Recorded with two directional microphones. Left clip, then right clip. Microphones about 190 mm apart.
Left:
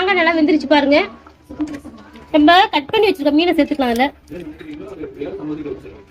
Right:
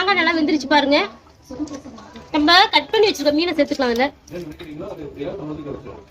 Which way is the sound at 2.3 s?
35° left (ahead or behind).